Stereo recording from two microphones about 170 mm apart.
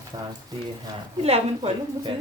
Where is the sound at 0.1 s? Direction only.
30° right (ahead or behind).